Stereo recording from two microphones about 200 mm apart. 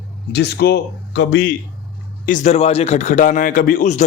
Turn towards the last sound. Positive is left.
turn(degrees=40)  # may be behind; listen again after turning